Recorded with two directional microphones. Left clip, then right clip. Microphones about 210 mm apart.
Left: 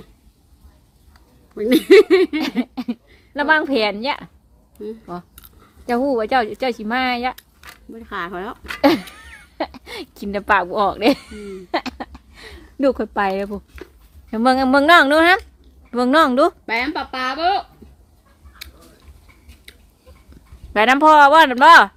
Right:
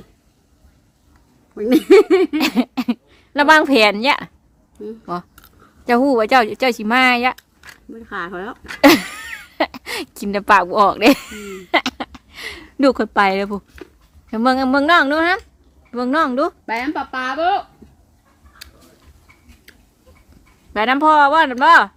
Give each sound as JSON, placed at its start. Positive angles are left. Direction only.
{"t": 1.5, "sound": "speech", "side_deg": -5}
{"t": 2.4, "sound": "a sound", "side_deg": -20}
{"t": 5.8, "sound": "a woman's voice", "side_deg": -20}
{"t": 7.3, "sound": "speech", "side_deg": 0}
{"t": 8.8, "sound": "speech", "side_deg": -20}
{"t": 14.3, "sound": "a woman's voice", "side_deg": 0}
{"t": 16.6, "sound": "a woman's voice", "side_deg": -10}
{"t": 20.7, "sound": "speech", "side_deg": 10}